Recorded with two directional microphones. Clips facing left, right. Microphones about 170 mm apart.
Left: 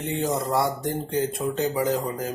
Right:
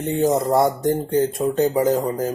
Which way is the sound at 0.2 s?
45° right (ahead or behind).